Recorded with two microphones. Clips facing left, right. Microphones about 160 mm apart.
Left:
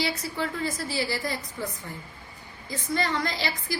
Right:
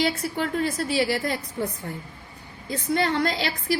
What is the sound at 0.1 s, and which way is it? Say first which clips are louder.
A woman's voice: right 4 dB; 65° right (ahead or behind).